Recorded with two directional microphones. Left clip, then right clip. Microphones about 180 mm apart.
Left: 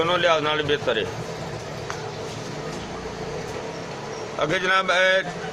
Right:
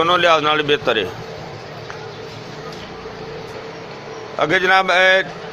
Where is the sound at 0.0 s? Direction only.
40° right (ahead or behind).